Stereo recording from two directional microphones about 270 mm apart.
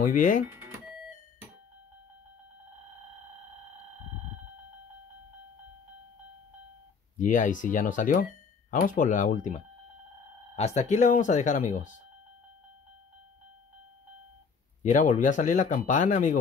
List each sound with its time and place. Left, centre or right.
0.0 s speech: left
0.5 s a sound: centre
7.2 s speech: left
14.8 s speech: left